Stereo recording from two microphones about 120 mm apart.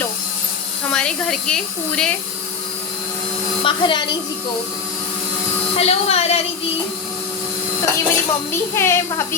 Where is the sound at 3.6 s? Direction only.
45° left (ahead or behind).